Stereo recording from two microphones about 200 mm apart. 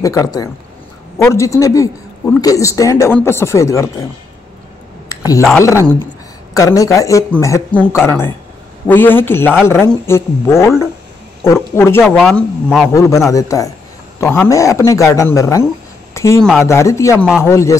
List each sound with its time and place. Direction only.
0.0 s speech: 15° left (ahead or behind)
5.1 s a sound: 20° left (ahead or behind)
6.5 s speech: 15° left (ahead or behind)
12.0 s speech: centre (ahead or behind)
16.1 s a sound: 15° left (ahead or behind)
16.6 s speech: 15° left (ahead or behind)